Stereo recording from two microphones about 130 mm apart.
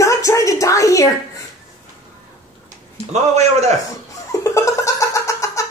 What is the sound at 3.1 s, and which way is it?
Speech, 60° right (ahead or behind).